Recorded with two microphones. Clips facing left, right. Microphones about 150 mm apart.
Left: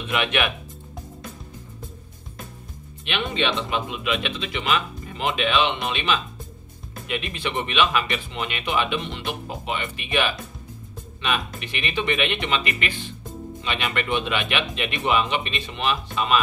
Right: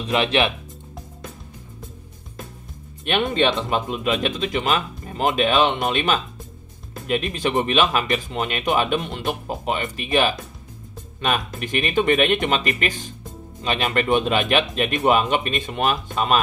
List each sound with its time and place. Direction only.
0.0 s speech: 35° right (ahead or behind)
3.1 s speech: 45° right (ahead or behind)